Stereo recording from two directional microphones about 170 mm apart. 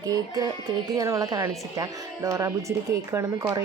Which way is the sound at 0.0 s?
20° right (ahead or behind).